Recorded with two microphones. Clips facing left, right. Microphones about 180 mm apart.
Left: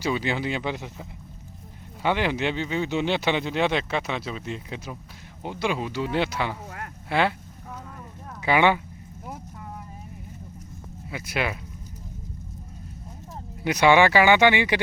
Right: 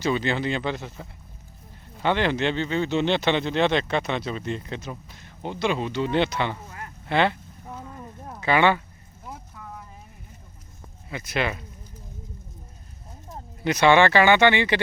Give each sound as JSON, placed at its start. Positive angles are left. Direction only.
{"t": 0.0, "sound": "speech", "side_deg": 10}
{"t": 6.7, "sound": "a sound", "side_deg": 65}
{"t": 7.1, "sound": "speech", "side_deg": 5}
{"t": 8.4, "sound": "speech", "side_deg": 15}
{"t": 11.1, "sound": "speech", "side_deg": 10}
{"t": 13.6, "sound": "speech", "side_deg": 10}